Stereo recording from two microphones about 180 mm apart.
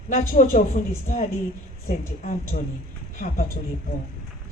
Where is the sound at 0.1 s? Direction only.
45° left (ahead or behind).